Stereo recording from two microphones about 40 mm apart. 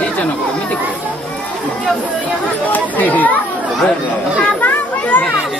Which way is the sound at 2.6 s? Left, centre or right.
Left.